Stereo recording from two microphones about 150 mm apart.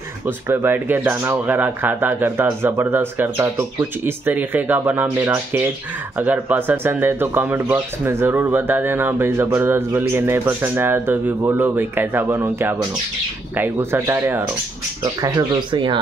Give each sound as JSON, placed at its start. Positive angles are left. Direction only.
{"t": 0.5, "sound": "speech", "side_deg": -15}
{"t": 15.2, "sound": "speech", "side_deg": -30}